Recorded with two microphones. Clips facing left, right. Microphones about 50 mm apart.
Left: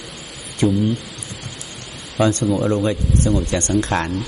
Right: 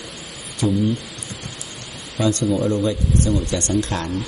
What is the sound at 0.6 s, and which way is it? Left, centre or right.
Speech, left.